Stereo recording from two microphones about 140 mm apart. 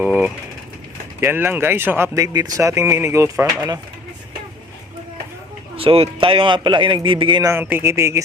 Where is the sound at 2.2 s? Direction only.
25° right (ahead or behind).